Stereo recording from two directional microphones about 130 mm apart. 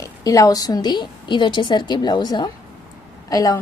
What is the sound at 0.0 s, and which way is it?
A woman's voice, 25° left (ahead or behind).